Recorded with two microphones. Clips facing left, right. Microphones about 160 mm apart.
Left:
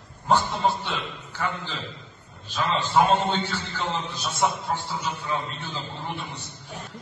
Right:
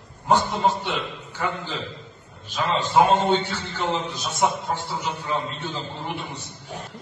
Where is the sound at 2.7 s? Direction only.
15° right (ahead or behind).